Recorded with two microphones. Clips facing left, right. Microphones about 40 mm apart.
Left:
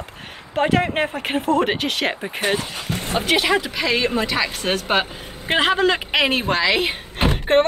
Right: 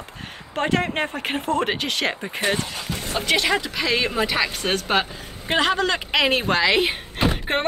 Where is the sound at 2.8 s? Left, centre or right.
Left.